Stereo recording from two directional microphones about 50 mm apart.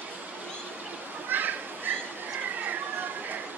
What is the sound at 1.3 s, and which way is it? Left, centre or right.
Children playing, right.